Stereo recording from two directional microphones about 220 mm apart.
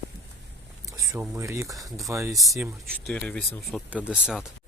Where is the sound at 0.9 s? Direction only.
15° right (ahead or behind).